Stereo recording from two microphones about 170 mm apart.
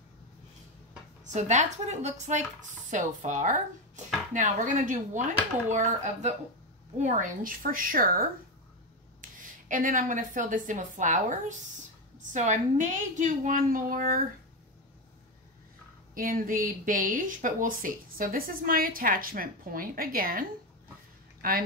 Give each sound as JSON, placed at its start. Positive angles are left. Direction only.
{"t": 1.2, "sound": "a woman's voice", "side_deg": -45}
{"t": 16.2, "sound": "speech", "side_deg": -55}